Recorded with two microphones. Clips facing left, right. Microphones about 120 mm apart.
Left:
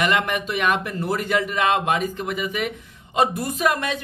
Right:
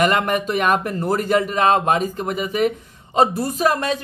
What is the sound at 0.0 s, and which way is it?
A man's voice, 40° right (ahead or behind).